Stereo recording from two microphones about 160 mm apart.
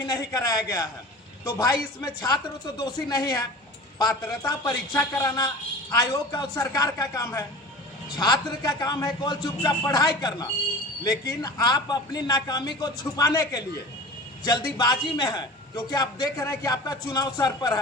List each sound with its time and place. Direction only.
0.0 s a man's voice: 25° left (ahead or behind)
14.8 s a man's voice: 25° left (ahead or behind)